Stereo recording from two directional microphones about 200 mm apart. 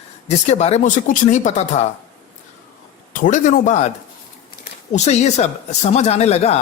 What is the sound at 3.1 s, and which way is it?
Speech, 40° left (ahead or behind).